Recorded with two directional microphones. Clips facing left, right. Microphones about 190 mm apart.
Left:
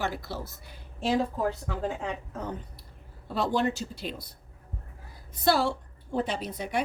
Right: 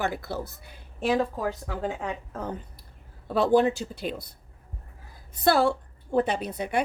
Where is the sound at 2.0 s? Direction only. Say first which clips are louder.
Right 1 dB; 50° right (ahead or behind).